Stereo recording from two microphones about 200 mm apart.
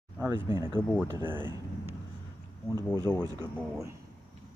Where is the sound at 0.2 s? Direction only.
15° right (ahead or behind).